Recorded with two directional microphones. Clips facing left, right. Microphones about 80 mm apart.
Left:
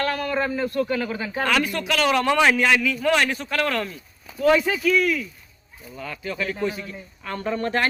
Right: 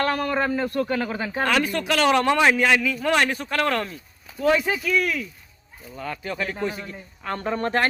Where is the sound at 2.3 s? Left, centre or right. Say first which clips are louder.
Even; right.